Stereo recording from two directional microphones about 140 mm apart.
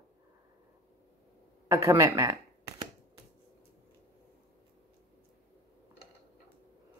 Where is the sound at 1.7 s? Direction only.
25° right (ahead or behind).